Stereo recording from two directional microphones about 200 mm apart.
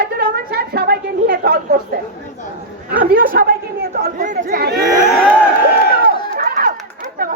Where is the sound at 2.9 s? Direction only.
45° right (ahead or behind).